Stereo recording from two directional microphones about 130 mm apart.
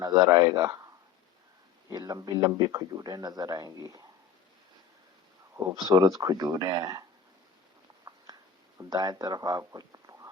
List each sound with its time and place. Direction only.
0.0 s speech: 30° right (ahead or behind)
1.9 s speech: 30° right (ahead or behind)
5.5 s speech: 30° right (ahead or behind)
8.8 s speech: 30° right (ahead or behind)